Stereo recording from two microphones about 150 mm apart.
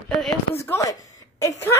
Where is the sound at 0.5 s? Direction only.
15° left (ahead or behind).